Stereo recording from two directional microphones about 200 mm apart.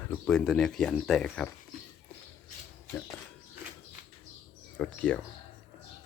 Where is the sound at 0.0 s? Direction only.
5° left (ahead or behind).